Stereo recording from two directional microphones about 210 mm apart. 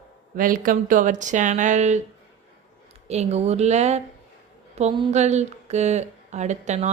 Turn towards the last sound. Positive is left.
turn(degrees=-35)  # may be behind; listen again after turning